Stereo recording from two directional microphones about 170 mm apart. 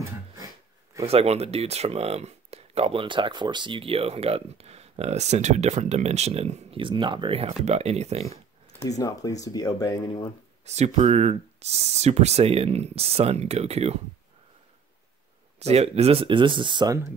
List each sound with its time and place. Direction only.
1.0 s speech: 40° right (ahead or behind)
8.7 s speech: 20° left (ahead or behind)
10.6 s speech: 40° right (ahead or behind)
15.6 s speech: 35° right (ahead or behind)